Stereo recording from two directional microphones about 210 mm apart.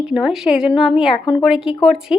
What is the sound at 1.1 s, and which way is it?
Speech, 25° left (ahead or behind).